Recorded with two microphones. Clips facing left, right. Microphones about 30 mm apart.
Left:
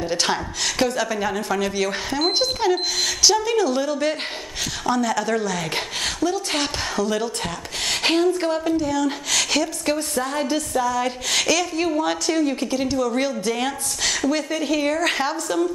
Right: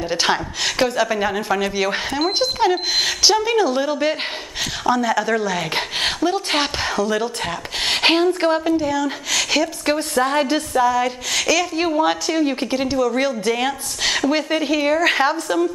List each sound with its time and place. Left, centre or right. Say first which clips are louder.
0.1 s a woman's voice: right 6 dB; centre
8.6 s a woman's voice: right 2 dB; centre
9.9 s a woman's voice: right 5 dB; right
10.7 s a woman's voice: right 6 dB; centre
11.1 s speech: right 1 dB; centre
11.7 s a woman's voice: right 3 dB; right
13.0 s a woman's voice: right 3 dB; centre
14.1 s a woman's voice: right 4 dB; right